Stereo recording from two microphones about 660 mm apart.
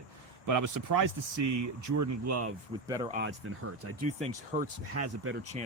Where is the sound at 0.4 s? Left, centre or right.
Right.